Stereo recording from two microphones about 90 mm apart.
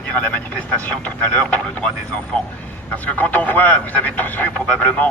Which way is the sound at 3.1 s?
15° left (ahead or behind).